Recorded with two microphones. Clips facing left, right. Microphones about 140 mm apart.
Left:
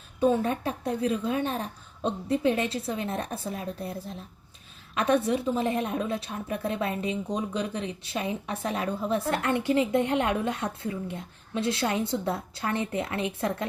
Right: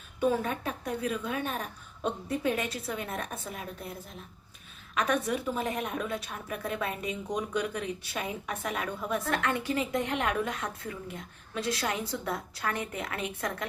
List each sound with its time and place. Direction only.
0.2 s a woman's voice: 30° left (ahead or behind)
4.9 s a woman's voice: 30° left (ahead or behind)